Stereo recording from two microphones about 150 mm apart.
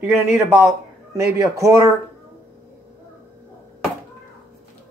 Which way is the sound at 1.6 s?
20° right (ahead or behind).